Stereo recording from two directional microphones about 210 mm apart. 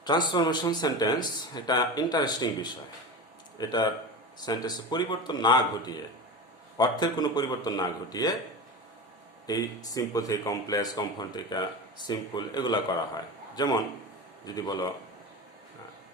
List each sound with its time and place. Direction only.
0.0 s speech: 20° left (ahead or behind)
9.5 s speech: 15° left (ahead or behind)